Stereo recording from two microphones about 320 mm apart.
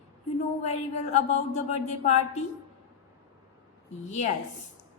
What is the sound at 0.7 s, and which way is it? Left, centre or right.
A woman's voice, left.